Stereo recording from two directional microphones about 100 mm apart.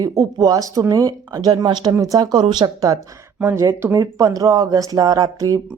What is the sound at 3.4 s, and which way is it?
A woman's voice, 25° right (ahead or behind).